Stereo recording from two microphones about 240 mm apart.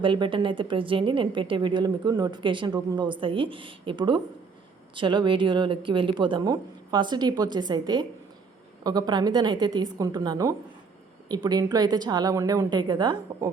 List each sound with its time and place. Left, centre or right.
0.0 s a woman's voice: right